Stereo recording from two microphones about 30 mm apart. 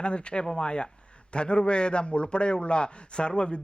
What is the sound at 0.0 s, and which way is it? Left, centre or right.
A man's voice, left.